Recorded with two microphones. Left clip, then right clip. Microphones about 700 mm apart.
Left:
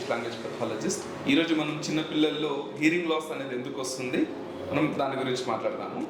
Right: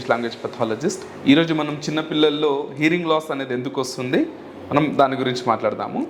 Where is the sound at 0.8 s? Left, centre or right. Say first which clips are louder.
Right 6 dB; right.